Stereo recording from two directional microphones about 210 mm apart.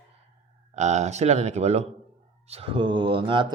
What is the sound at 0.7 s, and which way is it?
Speech, 35° right (ahead or behind).